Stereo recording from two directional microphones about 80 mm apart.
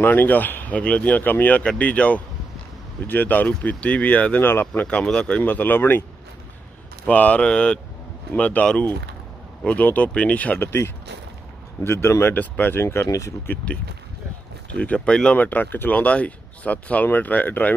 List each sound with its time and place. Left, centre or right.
0.0 s speech: left
4.8 s speech: centre
7.1 s speech: centre
10.6 s speech: left
14.8 s speech: centre